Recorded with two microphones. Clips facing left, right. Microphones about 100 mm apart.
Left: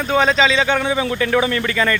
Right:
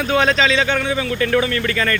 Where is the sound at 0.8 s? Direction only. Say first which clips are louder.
Left 1 dB; 25° left (ahead or behind).